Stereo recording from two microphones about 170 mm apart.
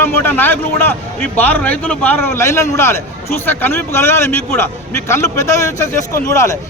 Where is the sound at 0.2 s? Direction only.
10° left (ahead or behind).